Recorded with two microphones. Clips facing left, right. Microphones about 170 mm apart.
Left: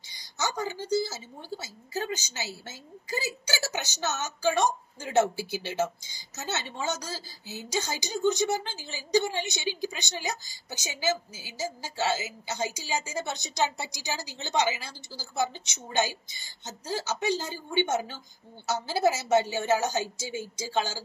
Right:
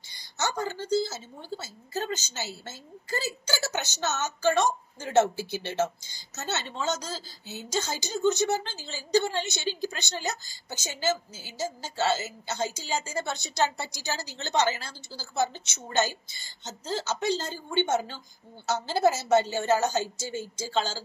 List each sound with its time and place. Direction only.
0.7 s a woman's voice: 15° left (ahead or behind)
6.3 s a woman's voice: 65° right (ahead or behind)
6.6 s a woman's voice: 10° left (ahead or behind)